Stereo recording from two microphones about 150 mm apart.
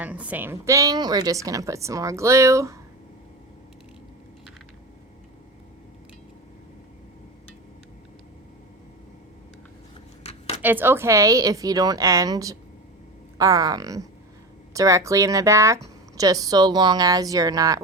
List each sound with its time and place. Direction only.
0.0 s a woman's voice: 10° right (ahead or behind)
10.3 s a sound: 45° left (ahead or behind)
10.6 s a woman's voice: 15° right (ahead or behind)